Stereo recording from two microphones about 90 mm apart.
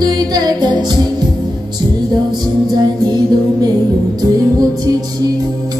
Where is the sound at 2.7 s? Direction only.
50° right (ahead or behind).